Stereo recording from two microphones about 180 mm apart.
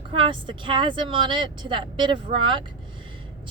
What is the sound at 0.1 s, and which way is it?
A woman's voice, 30° right (ahead or behind).